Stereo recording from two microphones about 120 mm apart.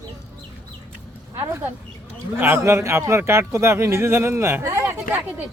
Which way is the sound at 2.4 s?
20° right (ahead or behind).